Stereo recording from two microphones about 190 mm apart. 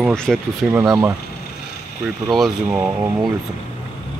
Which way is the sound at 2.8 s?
15° right (ahead or behind).